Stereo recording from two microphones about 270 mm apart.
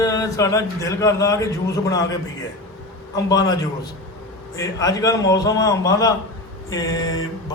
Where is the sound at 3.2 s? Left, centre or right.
Centre.